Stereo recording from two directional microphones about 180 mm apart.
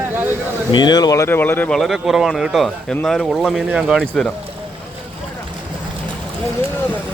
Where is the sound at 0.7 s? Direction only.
20° left (ahead or behind); by 4.3 s centre (ahead or behind).